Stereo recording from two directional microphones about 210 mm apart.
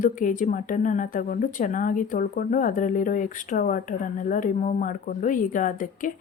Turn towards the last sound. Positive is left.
turn(degrees=40)  # may be behind; listen again after turning